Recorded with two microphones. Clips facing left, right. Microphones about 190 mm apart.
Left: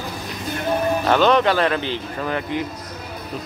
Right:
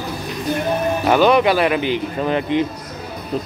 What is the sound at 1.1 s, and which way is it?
Speech, 10° right (ahead or behind).